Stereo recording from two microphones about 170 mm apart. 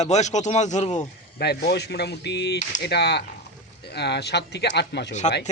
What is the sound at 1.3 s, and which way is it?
Speech, 70° left (ahead or behind).